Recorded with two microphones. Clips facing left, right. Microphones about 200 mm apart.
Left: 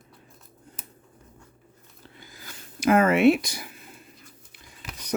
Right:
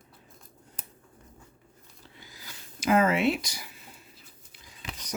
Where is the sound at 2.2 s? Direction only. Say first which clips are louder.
Left 3 dB; 50° left (ahead or behind).